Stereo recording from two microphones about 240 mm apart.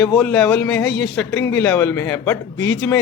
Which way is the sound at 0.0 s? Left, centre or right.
Centre.